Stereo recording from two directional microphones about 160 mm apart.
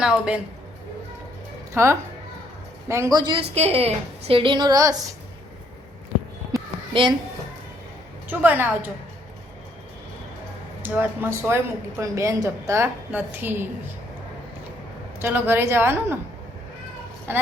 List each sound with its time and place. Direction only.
0.0 s a woman's voice: 5° right (ahead or behind)
1.7 s speech: 15° right (ahead or behind)
3.5 s a woman's voice: 40° right (ahead or behind); by 5.0 s 20° right (ahead or behind)
6.9 s speech: 30° right (ahead or behind)
8.3 s a woman's voice: 10° right (ahead or behind)
10.8 s a woman's voice: 10° right (ahead or behind)
15.2 s a woman's voice: 15° right (ahead or behind)